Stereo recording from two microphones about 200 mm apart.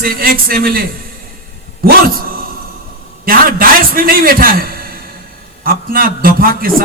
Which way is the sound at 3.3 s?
45° right (ahead or behind).